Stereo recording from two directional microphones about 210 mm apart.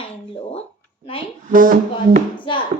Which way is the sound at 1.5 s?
40° right (ahead or behind).